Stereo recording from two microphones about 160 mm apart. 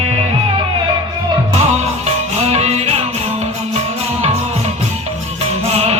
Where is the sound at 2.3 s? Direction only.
40° right (ahead or behind).